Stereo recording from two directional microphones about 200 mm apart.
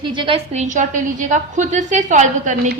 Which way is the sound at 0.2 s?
25° right (ahead or behind).